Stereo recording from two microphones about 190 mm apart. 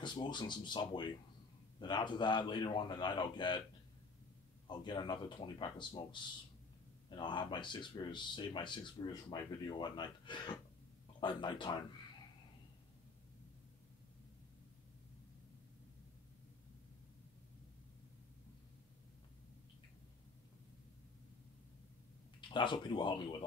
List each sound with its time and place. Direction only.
0.0 s speech: 25° left (ahead or behind)
4.6 s speech: 25° left (ahead or behind)
7.1 s speech: 25° left (ahead or behind)
22.5 s speech: 25° left (ahead or behind)